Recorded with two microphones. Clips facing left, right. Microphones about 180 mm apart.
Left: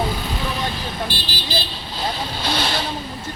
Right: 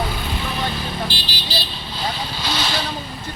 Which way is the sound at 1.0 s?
50° left (ahead or behind).